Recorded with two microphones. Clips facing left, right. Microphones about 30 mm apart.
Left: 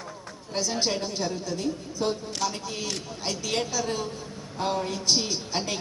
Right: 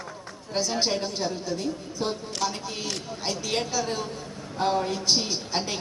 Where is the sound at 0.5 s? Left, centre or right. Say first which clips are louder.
Right 1 dB; centre.